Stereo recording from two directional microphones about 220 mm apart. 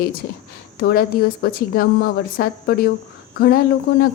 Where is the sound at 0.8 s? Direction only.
45° left (ahead or behind).